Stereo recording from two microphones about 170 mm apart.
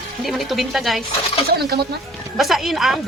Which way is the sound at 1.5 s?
70° right (ahead or behind).